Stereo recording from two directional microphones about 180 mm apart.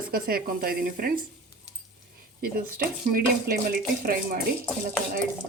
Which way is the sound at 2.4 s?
55° right (ahead or behind).